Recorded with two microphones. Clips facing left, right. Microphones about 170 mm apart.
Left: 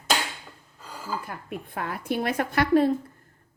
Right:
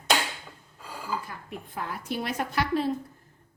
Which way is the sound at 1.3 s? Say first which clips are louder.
Left 4 dB; 60° left (ahead or behind).